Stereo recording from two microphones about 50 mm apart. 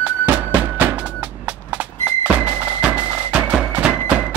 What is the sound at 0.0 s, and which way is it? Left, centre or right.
Music, right.